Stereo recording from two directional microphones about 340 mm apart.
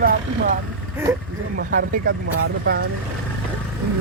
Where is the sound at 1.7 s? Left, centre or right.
Right.